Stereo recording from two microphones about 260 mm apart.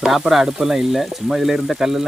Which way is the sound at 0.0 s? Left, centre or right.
Centre.